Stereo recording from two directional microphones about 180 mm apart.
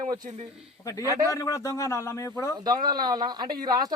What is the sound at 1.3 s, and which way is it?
A man's voice, 15° left (ahead or behind).